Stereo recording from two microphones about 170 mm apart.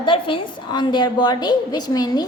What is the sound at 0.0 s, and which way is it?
A woman's voice, 30° left (ahead or behind).